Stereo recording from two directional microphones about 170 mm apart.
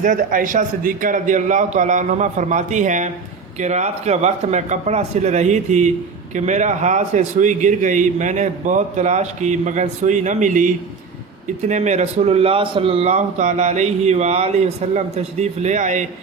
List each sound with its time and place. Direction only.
0.0 s a man's voice: 50° right (ahead or behind)
11.7 s speech: 45° right (ahead or behind)